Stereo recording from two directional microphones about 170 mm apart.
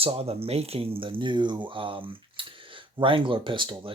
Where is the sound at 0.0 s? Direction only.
35° right (ahead or behind).